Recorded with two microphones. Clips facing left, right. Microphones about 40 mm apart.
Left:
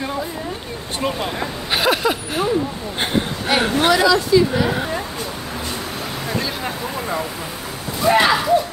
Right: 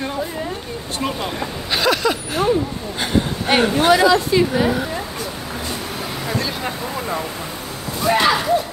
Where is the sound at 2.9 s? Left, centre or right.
Left.